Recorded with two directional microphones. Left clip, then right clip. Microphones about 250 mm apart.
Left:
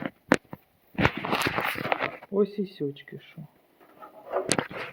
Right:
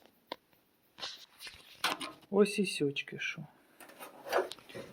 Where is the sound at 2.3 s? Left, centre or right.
Centre.